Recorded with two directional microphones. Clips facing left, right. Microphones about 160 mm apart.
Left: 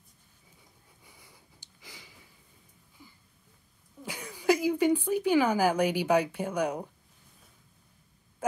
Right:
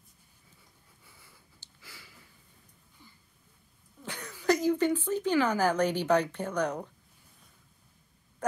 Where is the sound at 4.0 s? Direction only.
10° left (ahead or behind).